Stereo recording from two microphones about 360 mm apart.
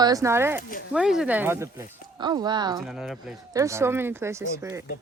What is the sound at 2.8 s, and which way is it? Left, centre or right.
Speech, centre.